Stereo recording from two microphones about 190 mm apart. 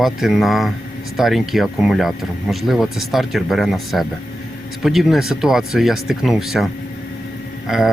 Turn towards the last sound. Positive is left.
turn(degrees=0)  # may be behind; listen again after turning